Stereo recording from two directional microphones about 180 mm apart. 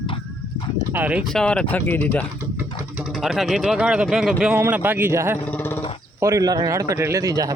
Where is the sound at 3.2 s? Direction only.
Centre (ahead or behind).